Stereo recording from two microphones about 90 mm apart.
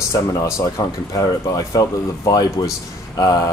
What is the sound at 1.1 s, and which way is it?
Speech, 40° left (ahead or behind).